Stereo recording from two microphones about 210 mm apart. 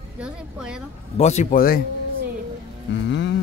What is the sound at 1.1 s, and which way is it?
Speech, 35° left (ahead or behind).